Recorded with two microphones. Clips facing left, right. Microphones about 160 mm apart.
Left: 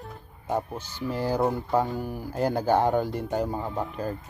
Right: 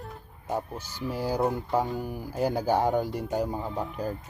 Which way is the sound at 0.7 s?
10° right (ahead or behind).